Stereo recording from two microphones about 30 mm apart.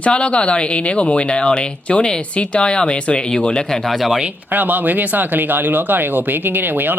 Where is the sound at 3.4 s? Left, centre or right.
Left.